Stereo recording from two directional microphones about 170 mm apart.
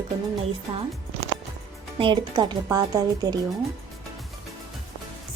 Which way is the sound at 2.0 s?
30° right (ahead or behind).